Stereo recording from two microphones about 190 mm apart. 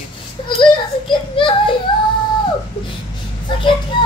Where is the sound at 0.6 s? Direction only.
25° left (ahead or behind).